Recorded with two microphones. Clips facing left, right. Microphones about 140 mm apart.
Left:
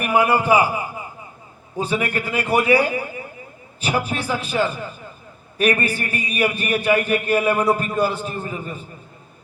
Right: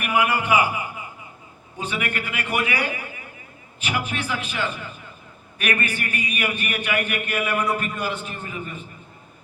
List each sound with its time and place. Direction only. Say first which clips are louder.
0.0 s a man's voice: left 5 dB; 35° left (ahead or behind)